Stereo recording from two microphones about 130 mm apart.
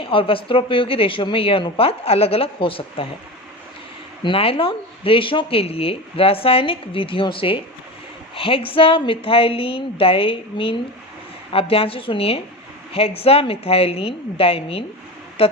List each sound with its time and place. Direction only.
0.0 s speech: 45° left (ahead or behind)
4.2 s speech: 45° left (ahead or behind)